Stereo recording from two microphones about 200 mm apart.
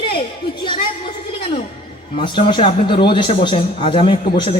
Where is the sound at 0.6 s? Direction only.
25° left (ahead or behind).